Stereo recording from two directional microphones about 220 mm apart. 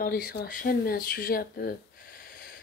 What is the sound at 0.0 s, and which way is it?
Speech, 45° left (ahead or behind).